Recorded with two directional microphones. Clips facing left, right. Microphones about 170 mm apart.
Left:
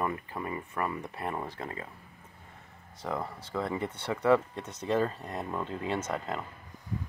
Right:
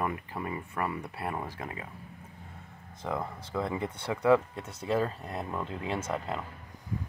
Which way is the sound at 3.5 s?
10° right (ahead or behind).